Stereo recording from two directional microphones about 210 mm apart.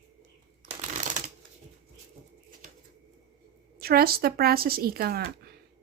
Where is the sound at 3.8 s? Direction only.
45° right (ahead or behind).